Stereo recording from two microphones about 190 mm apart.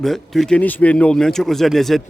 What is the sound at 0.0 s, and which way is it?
A man's voice, centre (ahead or behind).